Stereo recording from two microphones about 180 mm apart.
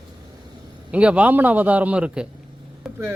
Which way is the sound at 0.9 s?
5° right (ahead or behind).